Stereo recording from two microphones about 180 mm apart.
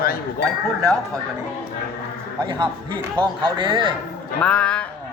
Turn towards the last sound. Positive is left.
turn(degrees=5)  # may be behind; listen again after turning